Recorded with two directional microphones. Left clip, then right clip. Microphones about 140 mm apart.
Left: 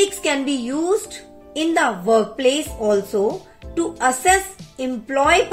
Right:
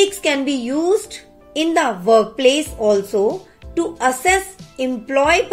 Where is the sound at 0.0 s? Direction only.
35° right (ahead or behind).